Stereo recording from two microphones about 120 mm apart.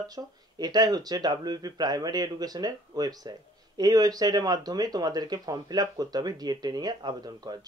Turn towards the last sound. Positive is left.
turn(degrees=-35)  # may be behind; listen again after turning